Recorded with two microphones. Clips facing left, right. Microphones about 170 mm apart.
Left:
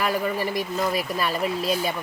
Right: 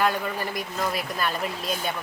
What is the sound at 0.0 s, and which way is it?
Speech, centre (ahead or behind).